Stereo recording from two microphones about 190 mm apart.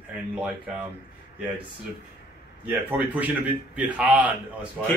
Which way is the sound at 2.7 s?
10° right (ahead or behind).